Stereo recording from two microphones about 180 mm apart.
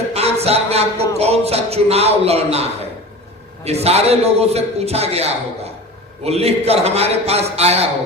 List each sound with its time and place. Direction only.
0.1 s music: 35° right (ahead or behind)